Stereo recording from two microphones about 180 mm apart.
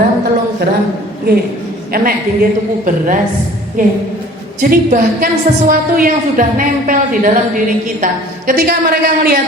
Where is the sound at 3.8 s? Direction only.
45° right (ahead or behind).